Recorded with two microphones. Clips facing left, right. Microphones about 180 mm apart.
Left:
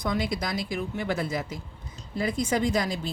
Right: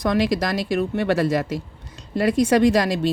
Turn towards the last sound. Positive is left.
turn(degrees=-80)